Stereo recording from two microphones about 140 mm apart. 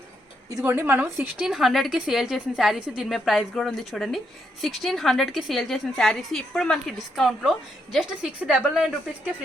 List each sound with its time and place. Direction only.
0.5 s a woman's voice: 15° right (ahead or behind)
1.4 s a woman's voice: 5° right (ahead or behind)